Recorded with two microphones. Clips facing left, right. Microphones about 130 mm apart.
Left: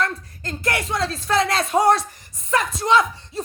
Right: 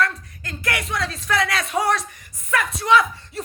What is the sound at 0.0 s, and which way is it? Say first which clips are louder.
A woman's voice: right 1 dB; 25° left (ahead or behind).